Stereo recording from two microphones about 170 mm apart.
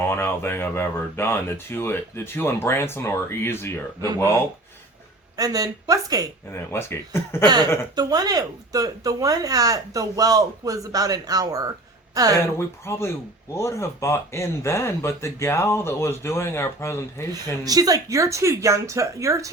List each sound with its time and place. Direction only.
0.1 s speech: 15° left (ahead or behind)
5.4 s speech: 20° right (ahead or behind)
6.5 s speech: 15° left (ahead or behind)
7.4 s speech: 25° right (ahead or behind)
12.5 s speech: 15° left (ahead or behind)
17.6 s speech: 20° right (ahead or behind)